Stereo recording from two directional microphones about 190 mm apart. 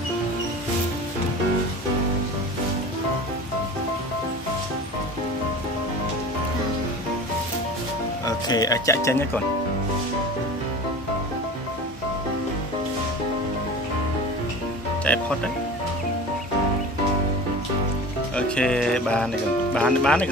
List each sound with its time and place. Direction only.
8.3 s speech: 20° left (ahead or behind)
15.0 s music: 5° left (ahead or behind)
18.3 s music: 5° left (ahead or behind)
19.7 s speech: 5° left (ahead or behind)